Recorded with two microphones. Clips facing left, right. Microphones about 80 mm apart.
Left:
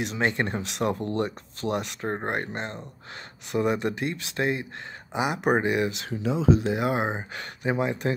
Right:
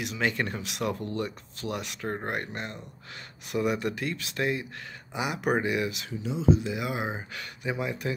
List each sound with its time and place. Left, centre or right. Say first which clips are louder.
0.0 s speech: left 3 dB; left
6.5 s speech: left 3 dB; left